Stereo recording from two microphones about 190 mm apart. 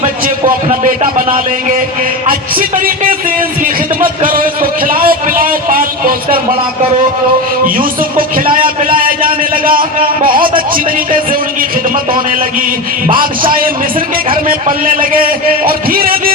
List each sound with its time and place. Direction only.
2.6 s a man's voice: 45° right (ahead or behind)
4.2 s a man's voice: 45° right (ahead or behind)
8.5 s a man's voice: 45° right (ahead or behind)
14.4 s a man's voice: 45° right (ahead or behind)